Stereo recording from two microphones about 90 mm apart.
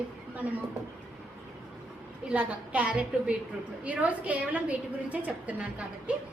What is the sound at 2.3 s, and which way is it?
A woman's voice, 15° right (ahead or behind).